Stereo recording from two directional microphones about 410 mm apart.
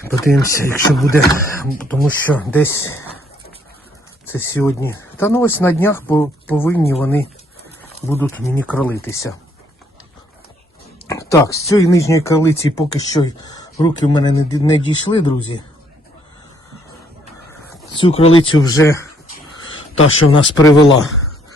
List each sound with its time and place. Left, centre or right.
0.0 s speech: centre
4.3 s speech: centre
11.1 s speech: centre
17.5 s speech: centre
20.6 s speech: centre